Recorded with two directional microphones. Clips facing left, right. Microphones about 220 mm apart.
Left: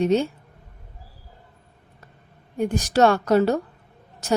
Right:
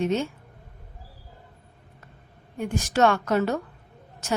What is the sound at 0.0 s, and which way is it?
Speech, 35° left (ahead or behind).